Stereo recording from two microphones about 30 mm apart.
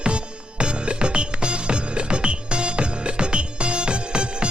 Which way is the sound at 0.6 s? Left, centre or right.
Right.